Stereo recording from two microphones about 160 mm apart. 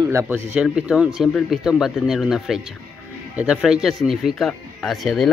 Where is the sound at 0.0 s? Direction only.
20° right (ahead or behind).